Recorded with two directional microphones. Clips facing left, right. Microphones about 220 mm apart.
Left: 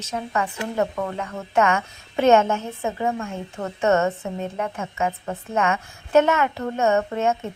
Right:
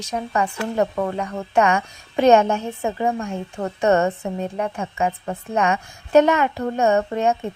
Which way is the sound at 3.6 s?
35° right (ahead or behind).